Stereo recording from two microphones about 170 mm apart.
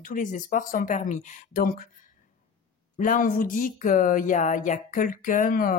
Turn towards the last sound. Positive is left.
turn(degrees=55)  # may be behind; listen again after turning